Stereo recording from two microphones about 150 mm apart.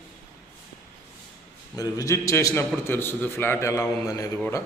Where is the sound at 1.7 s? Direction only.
25° left (ahead or behind).